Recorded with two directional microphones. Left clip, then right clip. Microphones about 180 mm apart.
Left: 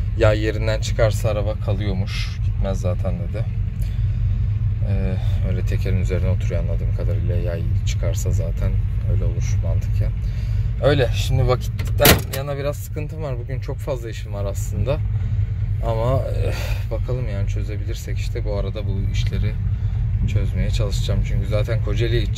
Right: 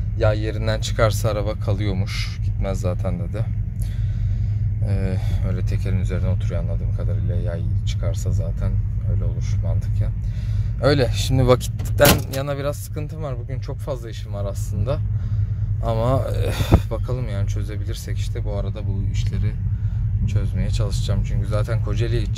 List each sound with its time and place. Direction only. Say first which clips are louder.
0.2 s speech: left 4 dB; centre (ahead or behind)
0.7 s speech: right 2 dB; 20° right (ahead or behind)
4.9 s speech: even; 25° right (ahead or behind)
5.6 s speech: left 3 dB; 5° right (ahead or behind)
10.8 s speech: left 1 dB; 30° right (ahead or behind)
12.4 s speech: right 1 dB; 20° right (ahead or behind); by 15.0 s 5° right (ahead or behind)
15.8 s speech: even; 20° right (ahead or behind)
17.1 s speech: left 1 dB; 20° right (ahead or behind)
18.3 s speech: left 4 dB; 5° right (ahead or behind)
20.2 s speech: left 2 dB; 10° right (ahead or behind)